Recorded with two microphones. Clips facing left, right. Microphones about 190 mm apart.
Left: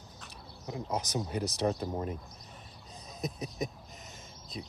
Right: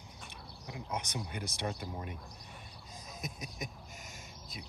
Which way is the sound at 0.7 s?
35° left (ahead or behind).